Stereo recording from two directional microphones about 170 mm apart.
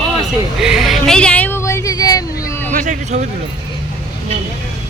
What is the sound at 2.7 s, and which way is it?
Speech, 50° right (ahead or behind).